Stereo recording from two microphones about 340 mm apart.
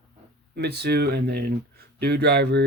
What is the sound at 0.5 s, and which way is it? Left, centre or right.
Speech, right.